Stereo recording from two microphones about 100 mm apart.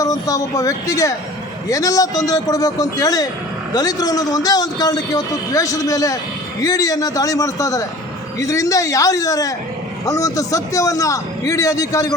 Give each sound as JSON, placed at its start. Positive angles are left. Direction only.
{"t": 0.0, "sound": "speech", "side_deg": 35}